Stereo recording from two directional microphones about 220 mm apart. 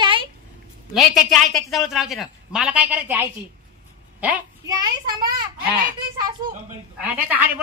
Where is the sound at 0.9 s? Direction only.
Centre (ahead or behind).